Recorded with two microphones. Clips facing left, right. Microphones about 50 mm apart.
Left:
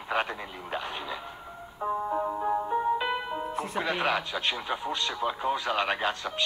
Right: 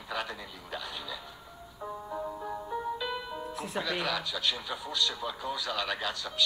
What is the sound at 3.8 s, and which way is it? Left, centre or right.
A man's voice, left.